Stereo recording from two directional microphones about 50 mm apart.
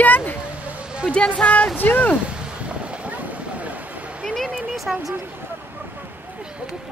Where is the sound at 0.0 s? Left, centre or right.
Left.